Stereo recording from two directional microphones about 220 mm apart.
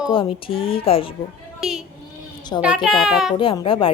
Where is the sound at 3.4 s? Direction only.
25° left (ahead or behind).